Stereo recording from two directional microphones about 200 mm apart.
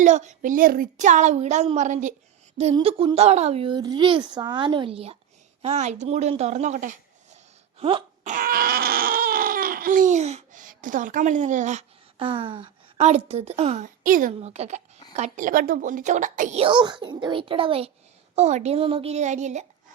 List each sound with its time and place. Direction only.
0.0 s a woman's voice: 35° right (ahead or behind)
2.7 s a child's voice: 25° right (ahead or behind)
7.8 s a sound: 30° right (ahead or behind)
8.3 s crying: 45° right (ahead or behind)
15.1 s a woman's voice: 35° right (ahead or behind)
16.6 s a child's voice: 25° right (ahead or behind)